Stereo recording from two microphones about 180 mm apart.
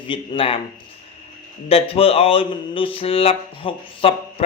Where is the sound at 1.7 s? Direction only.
30° left (ahead or behind).